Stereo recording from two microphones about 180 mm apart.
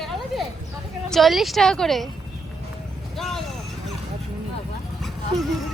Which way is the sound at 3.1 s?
Centre (ahead or behind).